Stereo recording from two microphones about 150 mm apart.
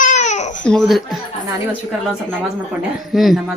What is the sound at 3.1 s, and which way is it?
Speech, 5° right (ahead or behind).